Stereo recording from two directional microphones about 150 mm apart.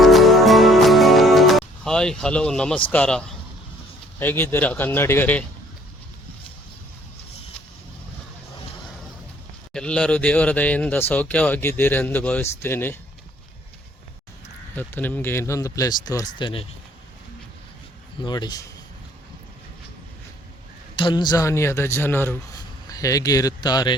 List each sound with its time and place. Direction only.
0.0 s music: centre (ahead or behind)
4.2 s speech: 15° left (ahead or behind)
9.7 s speech: 5° left (ahead or behind)
14.8 s speech: 10° left (ahead or behind); by 16.6 s 35° left (ahead or behind)
18.2 s speech: 30° left (ahead or behind)
21.0 s speech: 30° left (ahead or behind)